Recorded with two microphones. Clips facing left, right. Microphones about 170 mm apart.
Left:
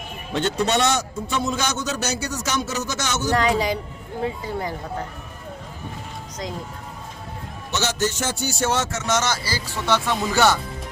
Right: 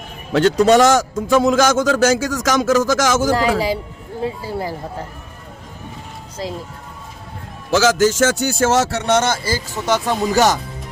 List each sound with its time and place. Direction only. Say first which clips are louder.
0.3 s speech: right 9 dB; 90° right
4.4 s speech: right 3 dB; 35° right (ahead or behind)
7.7 s speech: right 10 dB; 90° right
8.9 s speech: right 6 dB; 60° right (ahead or behind); by 10.6 s 40° right (ahead or behind)